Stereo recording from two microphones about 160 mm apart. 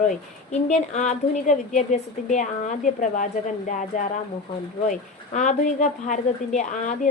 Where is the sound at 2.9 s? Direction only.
50° left (ahead or behind).